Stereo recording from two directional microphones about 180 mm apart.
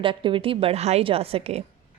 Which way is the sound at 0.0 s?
30° right (ahead or behind).